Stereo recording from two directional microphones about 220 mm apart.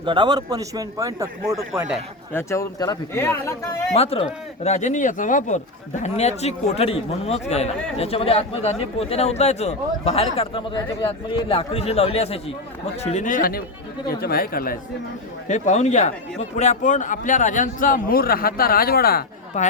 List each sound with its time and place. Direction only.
0.0 s a man's voice: 20° right (ahead or behind)
2.3 s a man's voice: 15° left (ahead or behind)
3.9 s a man's voice: 25° left (ahead or behind); by 19.6 s 45° left (ahead or behind)